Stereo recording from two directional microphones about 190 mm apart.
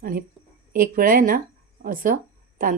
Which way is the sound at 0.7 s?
45° right (ahead or behind).